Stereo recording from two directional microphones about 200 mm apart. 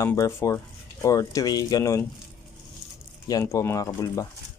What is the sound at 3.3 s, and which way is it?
Speech, 15° left (ahead or behind).